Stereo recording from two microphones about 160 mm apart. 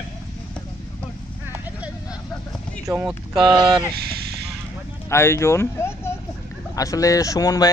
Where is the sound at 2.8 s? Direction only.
15° right (ahead or behind).